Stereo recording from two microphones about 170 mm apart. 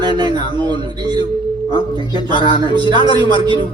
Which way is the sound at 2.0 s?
25° left (ahead or behind).